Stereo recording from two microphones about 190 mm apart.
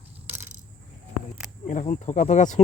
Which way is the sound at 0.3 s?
10° right (ahead or behind).